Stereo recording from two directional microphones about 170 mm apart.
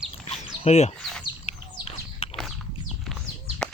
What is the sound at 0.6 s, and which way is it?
Speech, 40° left (ahead or behind).